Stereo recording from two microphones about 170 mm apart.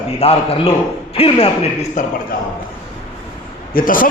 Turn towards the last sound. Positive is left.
turn(degrees=55)  # may be behind; listen again after turning